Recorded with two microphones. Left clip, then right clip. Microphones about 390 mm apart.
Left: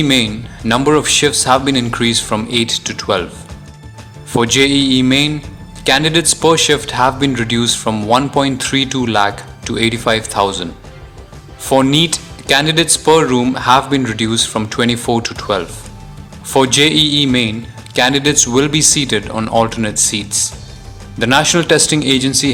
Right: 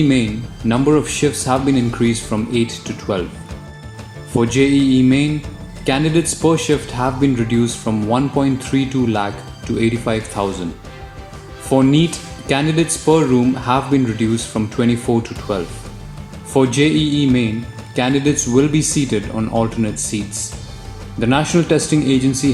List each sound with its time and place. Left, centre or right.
0.7 s a man's voice: left
4.4 s a man's voice: left
11.7 s a man's voice: left